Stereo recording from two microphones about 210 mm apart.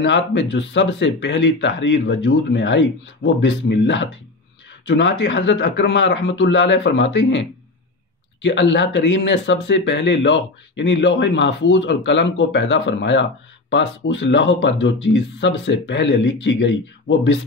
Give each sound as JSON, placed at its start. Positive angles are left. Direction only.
{"t": 0.0, "sound": "speech", "side_deg": 60}